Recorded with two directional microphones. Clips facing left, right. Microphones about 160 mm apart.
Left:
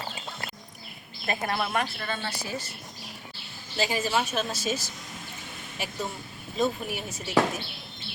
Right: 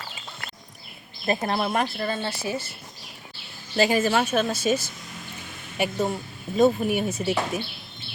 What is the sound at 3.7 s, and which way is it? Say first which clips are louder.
A woman's voice: right 6 dB; 55° right (ahead or behind).